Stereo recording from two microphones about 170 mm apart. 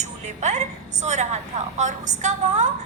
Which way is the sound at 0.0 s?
45° right (ahead or behind).